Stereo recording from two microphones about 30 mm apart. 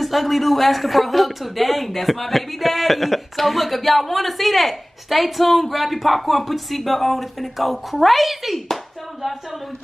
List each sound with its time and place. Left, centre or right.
0.0 s speech: centre